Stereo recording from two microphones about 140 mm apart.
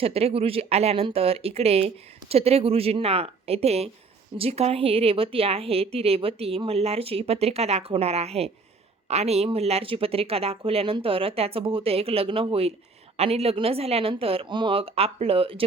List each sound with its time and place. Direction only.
0.0 s a woman's voice: 45° right (ahead or behind)